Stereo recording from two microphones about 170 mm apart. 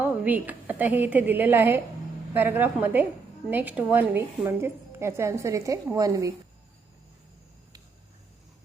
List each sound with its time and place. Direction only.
0.0 s a woman's voice: 10° right (ahead or behind)